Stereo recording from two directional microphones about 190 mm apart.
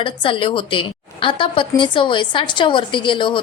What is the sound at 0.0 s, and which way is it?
A woman's voice, 25° left (ahead or behind).